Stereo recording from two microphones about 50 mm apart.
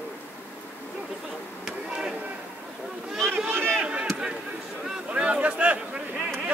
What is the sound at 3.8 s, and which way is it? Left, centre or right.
Speech, right.